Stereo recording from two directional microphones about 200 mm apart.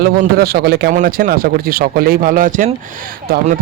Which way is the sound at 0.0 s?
50° right (ahead or behind).